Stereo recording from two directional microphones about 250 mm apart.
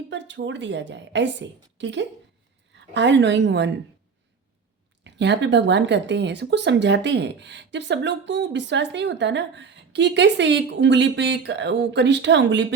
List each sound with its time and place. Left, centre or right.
0.1 s speech: right
5.0 s speech: right